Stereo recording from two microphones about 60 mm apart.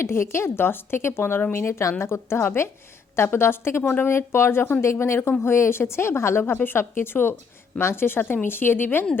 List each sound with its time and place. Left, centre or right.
0.0 s a woman's voice: left